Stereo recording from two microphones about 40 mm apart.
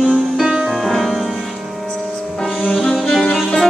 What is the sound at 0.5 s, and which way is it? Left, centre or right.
Music, centre.